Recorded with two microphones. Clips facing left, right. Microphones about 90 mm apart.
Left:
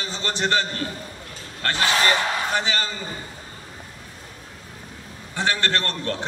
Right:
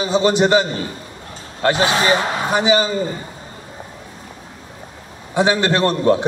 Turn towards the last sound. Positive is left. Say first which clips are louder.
# right 11 dB
turn(degrees=-15)  # may be behind; listen again after turning